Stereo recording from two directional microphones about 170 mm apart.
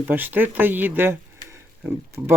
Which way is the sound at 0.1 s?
10° right (ahead or behind).